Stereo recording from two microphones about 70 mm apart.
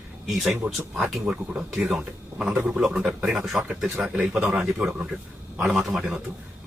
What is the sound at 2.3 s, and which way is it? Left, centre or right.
Speech, centre.